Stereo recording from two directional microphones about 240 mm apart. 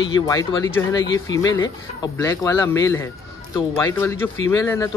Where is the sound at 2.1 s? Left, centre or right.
Centre.